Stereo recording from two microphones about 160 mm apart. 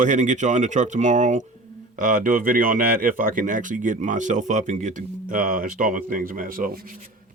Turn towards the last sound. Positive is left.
turn(degrees=-60)  # may be behind; listen again after turning